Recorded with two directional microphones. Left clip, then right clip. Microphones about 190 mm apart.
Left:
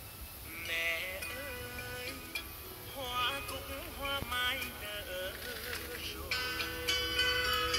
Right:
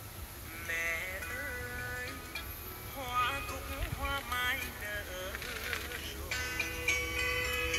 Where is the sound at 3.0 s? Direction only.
50° left (ahead or behind).